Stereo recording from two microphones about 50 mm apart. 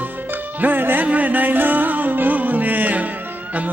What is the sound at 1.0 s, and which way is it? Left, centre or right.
Music, right.